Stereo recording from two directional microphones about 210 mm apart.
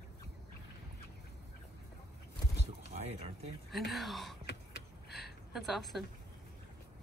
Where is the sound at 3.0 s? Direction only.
30° right (ahead or behind).